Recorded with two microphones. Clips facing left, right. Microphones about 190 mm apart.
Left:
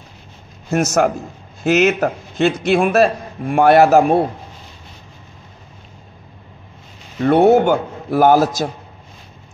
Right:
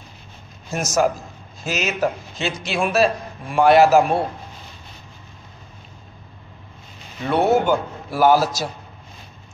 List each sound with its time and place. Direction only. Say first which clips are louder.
0.7 s a man's voice: left 4 dB; 65° left (ahead or behind)
7.2 s a man's voice: left 6 dB; 55° left (ahead or behind)